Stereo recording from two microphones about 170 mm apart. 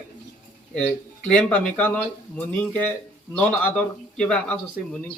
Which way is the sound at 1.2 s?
5° left (ahead or behind).